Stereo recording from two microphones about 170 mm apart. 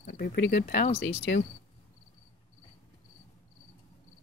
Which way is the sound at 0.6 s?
50° left (ahead or behind).